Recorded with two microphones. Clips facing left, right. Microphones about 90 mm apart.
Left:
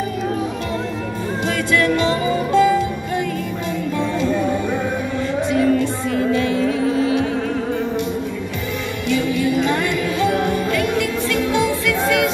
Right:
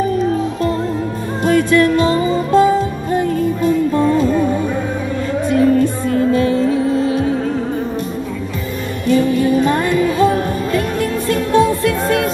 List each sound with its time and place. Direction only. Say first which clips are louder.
1.4 s music: right 7 dB; 45° right (ahead or behind)
5.5 s music: right 5 dB; 40° right (ahead or behind)
9.0 s music: right 6 dB; 40° right (ahead or behind)